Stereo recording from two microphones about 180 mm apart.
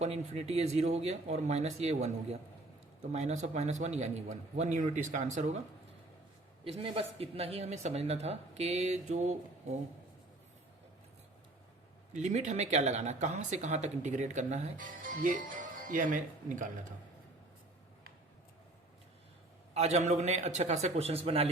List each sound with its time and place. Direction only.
0.0 s speech: 35° right (ahead or behind)
6.7 s speech: 35° right (ahead or behind)
12.1 s speech: 40° right (ahead or behind)
19.7 s speech: 35° right (ahead or behind)